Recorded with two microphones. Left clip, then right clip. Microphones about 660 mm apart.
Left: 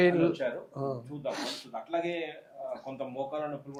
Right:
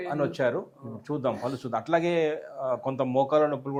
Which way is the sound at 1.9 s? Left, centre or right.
Right.